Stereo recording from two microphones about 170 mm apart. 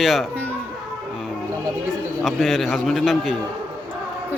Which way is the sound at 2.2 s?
Centre (ahead or behind).